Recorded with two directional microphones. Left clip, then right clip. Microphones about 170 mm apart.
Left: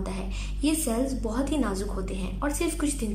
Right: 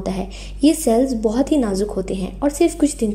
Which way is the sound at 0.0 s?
35° right (ahead or behind).